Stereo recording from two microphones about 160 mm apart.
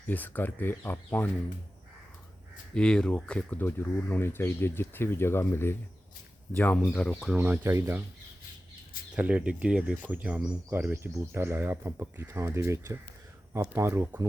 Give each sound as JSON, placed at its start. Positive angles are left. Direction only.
{"t": 0.1, "sound": "speech", "side_deg": 10}
{"t": 2.7, "sound": "speech", "side_deg": 5}
{"t": 7.3, "sound": "speech", "side_deg": -10}
{"t": 9.1, "sound": "speech", "side_deg": -10}